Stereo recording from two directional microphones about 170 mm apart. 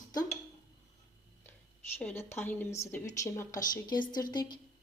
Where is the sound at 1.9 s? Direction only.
10° left (ahead or behind).